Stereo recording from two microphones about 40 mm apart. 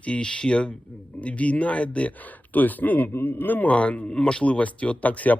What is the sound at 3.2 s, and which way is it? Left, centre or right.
Speech, left.